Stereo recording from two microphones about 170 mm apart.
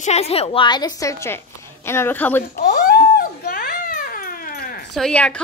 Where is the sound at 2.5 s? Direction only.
55° left (ahead or behind).